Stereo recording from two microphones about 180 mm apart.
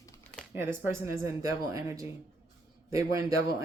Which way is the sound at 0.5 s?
15° right (ahead or behind).